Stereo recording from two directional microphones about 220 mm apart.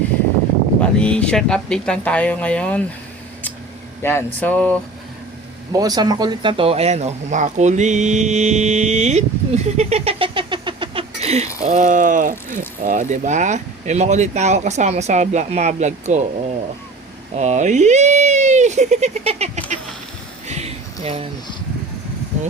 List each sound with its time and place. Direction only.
0.8 s speech: 5° left (ahead or behind)
4.0 s speech: 10° left (ahead or behind)
5.7 s speech: 15° right (ahead or behind)
20.5 s a sound: 30° right (ahead or behind)